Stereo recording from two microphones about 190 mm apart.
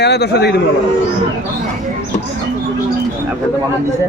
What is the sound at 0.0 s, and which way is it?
Speech, 60° left (ahead or behind).